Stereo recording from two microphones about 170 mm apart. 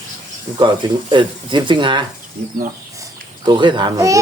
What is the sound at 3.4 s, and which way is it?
Speech, 30° right (ahead or behind).